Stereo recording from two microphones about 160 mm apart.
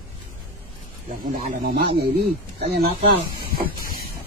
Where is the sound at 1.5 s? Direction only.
70° right (ahead or behind).